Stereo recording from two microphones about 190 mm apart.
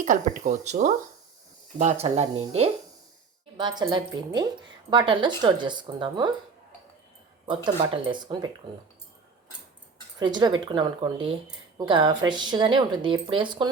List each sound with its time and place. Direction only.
0.0 s speech: 40° right (ahead or behind)
3.6 s speech: 25° right (ahead or behind)
7.4 s speech: 25° right (ahead or behind)
10.2 s speech: 20° right (ahead or behind)